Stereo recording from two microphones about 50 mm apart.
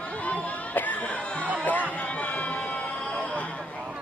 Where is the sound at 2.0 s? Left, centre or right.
Left.